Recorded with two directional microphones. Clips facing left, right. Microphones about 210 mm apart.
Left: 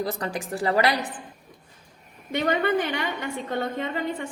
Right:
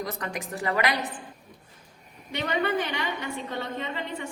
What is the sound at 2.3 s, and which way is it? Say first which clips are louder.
A woman's voice: left 4 dB; 50° left (ahead or behind).